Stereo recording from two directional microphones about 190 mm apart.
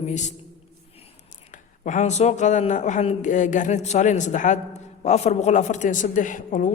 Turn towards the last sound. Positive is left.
turn(degrees=45)  # may be behind; listen again after turning